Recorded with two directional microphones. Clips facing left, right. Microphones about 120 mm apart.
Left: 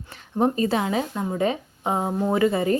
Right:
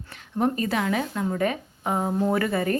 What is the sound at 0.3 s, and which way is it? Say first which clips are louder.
A woman's voice: left 3 dB; 25° left (ahead or behind).